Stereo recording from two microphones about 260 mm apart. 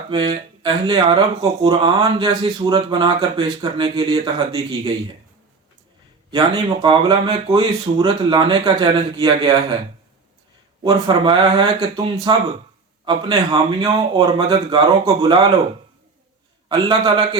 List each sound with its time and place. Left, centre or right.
0.1 s speech: centre
6.3 s speech: centre
10.8 s speech: centre
16.6 s speech: centre